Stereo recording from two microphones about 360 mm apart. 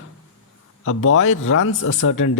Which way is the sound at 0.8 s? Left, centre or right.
Left.